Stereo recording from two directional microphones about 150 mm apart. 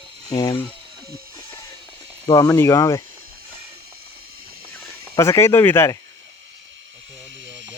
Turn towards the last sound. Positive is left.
turn(degrees=15)  # may be behind; listen again after turning